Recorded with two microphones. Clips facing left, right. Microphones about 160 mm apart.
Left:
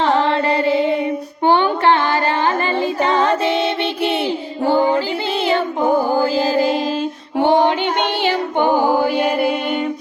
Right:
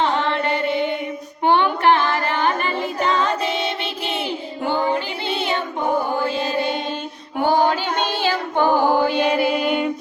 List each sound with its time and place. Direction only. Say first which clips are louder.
0.0 s music: left 4 dB; 35° left (ahead or behind)
0.4 s mantra: left 5 dB; 90° left
1.5 s carnatic music: left 2 dB; 30° left (ahead or behind)
3.1 s music: left 4 dB; 30° left (ahead or behind)
6.3 s music: left 6 dB; 90° left
7.3 s music: left 3 dB; 25° left (ahead or behind)
9.2 s music: left 1 dB; centre (ahead or behind)